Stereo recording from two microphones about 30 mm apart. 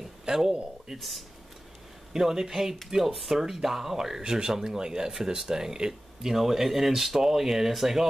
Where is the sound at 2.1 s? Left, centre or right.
Centre.